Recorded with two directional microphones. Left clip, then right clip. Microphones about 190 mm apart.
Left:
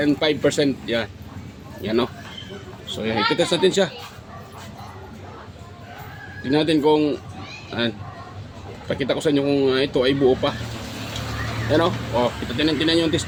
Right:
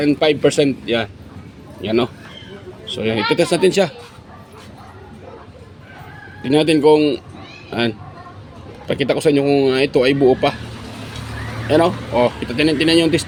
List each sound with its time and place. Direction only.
0.0 s speech: 30° right (ahead or behind)
6.5 s speech: 35° right (ahead or behind)
11.7 s speech: 30° right (ahead or behind)